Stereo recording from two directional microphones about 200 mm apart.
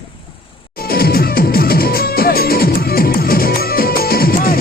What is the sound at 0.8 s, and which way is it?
Music, 50° left (ahead or behind).